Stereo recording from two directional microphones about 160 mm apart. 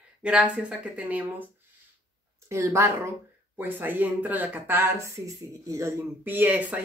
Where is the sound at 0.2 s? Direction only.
5° right (ahead or behind).